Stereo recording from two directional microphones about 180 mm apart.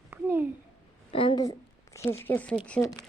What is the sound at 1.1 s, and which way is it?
A woman's voice, 30° left (ahead or behind).